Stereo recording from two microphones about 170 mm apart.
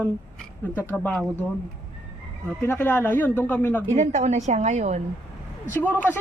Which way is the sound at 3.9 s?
45° right (ahead or behind).